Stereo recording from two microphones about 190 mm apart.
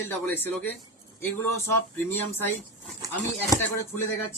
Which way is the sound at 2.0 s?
10° left (ahead or behind).